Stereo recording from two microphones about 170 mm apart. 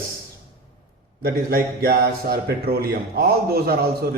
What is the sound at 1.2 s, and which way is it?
A man's voice, 65° right (ahead or behind).